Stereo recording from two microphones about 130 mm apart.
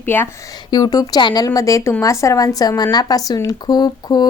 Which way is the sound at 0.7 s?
30° left (ahead or behind).